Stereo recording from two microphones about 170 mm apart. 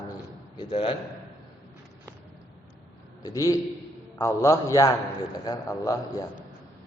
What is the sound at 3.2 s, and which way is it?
A man's voice, 20° left (ahead or behind).